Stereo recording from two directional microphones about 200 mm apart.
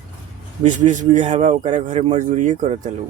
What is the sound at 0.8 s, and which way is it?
A man's voice, 40° right (ahead or behind).